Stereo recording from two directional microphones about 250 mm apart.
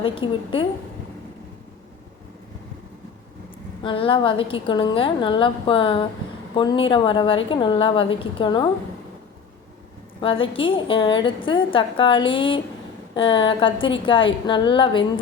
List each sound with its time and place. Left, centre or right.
0.0 s a woman's voice: left
3.8 s a woman's voice: left
10.2 s a woman's voice: left